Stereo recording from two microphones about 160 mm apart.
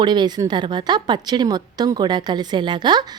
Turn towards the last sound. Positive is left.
turn(degrees=-25)  # may be behind; listen again after turning